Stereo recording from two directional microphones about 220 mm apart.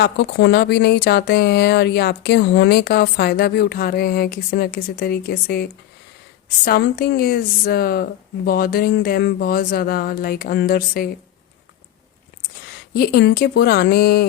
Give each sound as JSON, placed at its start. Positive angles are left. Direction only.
{"t": 0.0, "sound": "speech", "side_deg": 50}
{"t": 6.7, "sound": "speech", "side_deg": 45}
{"t": 12.9, "sound": "speech", "side_deg": 45}